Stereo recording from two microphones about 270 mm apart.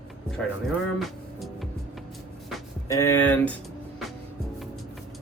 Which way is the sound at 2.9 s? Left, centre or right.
Centre.